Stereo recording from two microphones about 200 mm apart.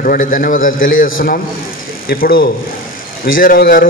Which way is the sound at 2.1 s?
45° left (ahead or behind).